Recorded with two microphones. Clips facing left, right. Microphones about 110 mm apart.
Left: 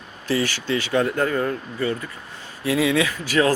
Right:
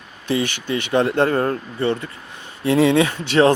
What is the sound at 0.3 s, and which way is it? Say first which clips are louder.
Speech: right 1 dB; 20° right (ahead or behind).